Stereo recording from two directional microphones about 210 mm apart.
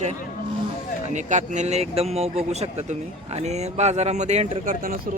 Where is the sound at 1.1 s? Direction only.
35° right (ahead or behind).